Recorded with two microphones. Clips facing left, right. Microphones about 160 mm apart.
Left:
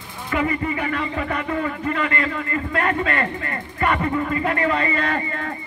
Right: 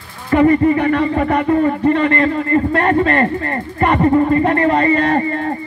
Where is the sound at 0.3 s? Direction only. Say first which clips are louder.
Right 12 dB; 45° right (ahead or behind).